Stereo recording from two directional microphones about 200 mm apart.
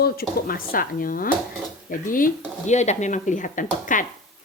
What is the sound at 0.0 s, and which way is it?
Speech, 50° left (ahead or behind).